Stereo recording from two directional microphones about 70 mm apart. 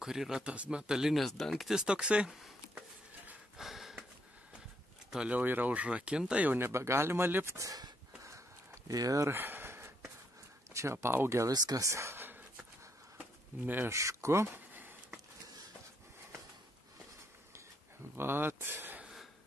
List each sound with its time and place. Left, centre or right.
0.0 s speech: centre
3.5 s a sound: centre
5.1 s speech: centre
6.6 s speech: right
7.5 s speech: right
8.8 s speech: right
9.3 s a sound: right
10.7 s speech: right
11.5 s speech: right
13.5 s speech: right
13.8 s speech: right
18.1 s speech: right